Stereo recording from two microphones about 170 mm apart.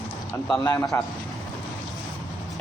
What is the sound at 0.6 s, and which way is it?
Speech, 20° left (ahead or behind).